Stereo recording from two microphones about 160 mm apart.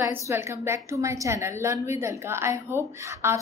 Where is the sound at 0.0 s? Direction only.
15° right (ahead or behind).